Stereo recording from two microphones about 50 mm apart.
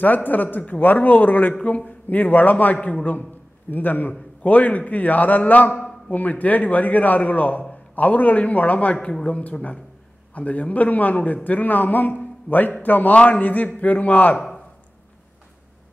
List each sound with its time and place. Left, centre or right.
0.0 s a man's voice: left
1.6 s a man's voice: left
14.3 s speech: centre